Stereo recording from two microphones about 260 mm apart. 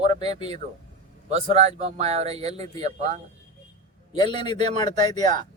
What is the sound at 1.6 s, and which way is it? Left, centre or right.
Speech, right.